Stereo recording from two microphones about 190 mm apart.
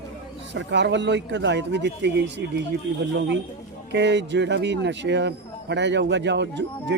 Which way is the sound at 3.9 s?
65° right (ahead or behind).